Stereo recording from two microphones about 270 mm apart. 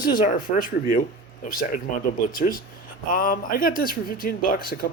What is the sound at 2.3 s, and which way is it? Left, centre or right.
A man's voice, left.